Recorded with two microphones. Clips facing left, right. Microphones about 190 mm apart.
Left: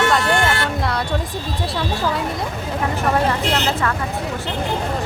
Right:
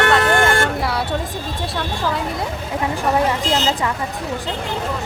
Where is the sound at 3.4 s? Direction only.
65° left (ahead or behind).